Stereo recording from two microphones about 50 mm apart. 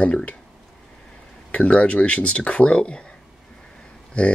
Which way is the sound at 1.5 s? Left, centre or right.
Left.